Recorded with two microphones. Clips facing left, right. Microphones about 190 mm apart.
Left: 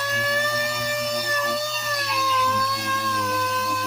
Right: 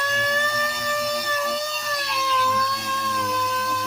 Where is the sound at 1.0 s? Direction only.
Centre (ahead or behind).